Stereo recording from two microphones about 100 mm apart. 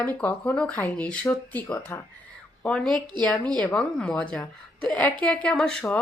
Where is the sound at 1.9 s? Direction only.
30° left (ahead or behind).